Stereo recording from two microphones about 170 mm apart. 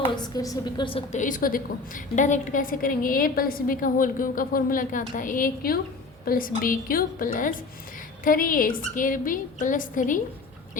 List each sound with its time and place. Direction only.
0.3 s a woman's voice: 20° left (ahead or behind)
1.1 s a woman's voice: 50° left (ahead or behind)